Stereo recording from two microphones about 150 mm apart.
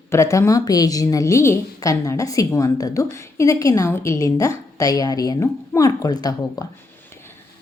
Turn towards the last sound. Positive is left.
turn(degrees=25)  # may be behind; listen again after turning